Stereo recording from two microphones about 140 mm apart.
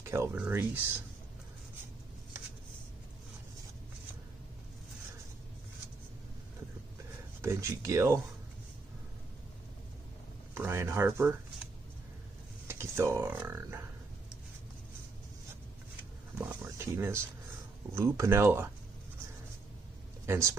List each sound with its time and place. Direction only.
0.1 s speech: 15° right (ahead or behind)
7.4 s speech: 20° right (ahead or behind)
10.5 s speech: 15° right (ahead or behind)
12.6 s speech: 20° right (ahead or behind)
16.6 s speech: 20° right (ahead or behind)
20.2 s speech: 20° right (ahead or behind)